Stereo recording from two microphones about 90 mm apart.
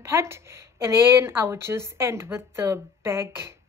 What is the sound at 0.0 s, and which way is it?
A woman's voice, 30° right (ahead or behind).